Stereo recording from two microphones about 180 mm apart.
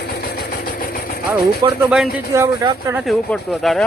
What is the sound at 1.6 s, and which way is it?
Speech, 20° right (ahead or behind).